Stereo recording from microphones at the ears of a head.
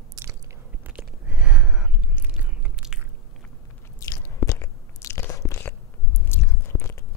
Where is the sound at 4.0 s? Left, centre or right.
Left.